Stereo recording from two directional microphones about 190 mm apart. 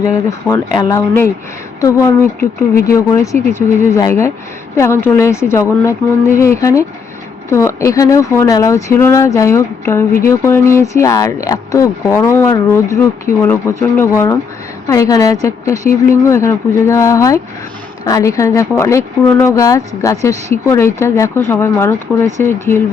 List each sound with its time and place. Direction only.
0.0 s speech: 15° left (ahead or behind)
2.4 s speech: 50° left (ahead or behind)
3.5 s speech: 15° left (ahead or behind)
14.0 s speech: 15° left (ahead or behind)